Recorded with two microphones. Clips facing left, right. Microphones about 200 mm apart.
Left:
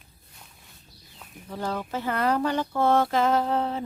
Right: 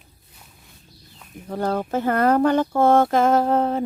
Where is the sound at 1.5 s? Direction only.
50° right (ahead or behind).